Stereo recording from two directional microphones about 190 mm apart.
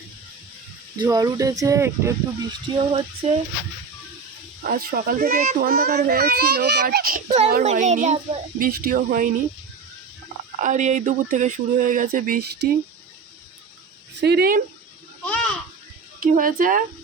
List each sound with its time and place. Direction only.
0.9 s speech: 20° right (ahead or behind)
4.6 s a child's voice: 50° right (ahead or behind)
7.6 s speech: 40° right (ahead or behind)
8.5 s a child's voice: 50° right (ahead or behind)
10.6 s speech: 40° right (ahead or behind)
14.2 s a child's voice: 60° right (ahead or behind)
15.2 s a sound: 5° left (ahead or behind)
16.2 s a child's voice: 45° right (ahead or behind)